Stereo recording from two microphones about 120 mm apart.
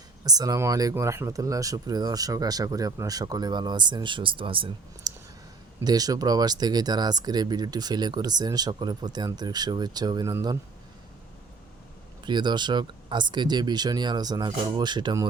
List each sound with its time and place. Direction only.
0.3 s speech: 30° right (ahead or behind); by 5.1 s 45° right (ahead or behind)
5.8 s speech: 30° right (ahead or behind)
12.2 s speech: 40° right (ahead or behind)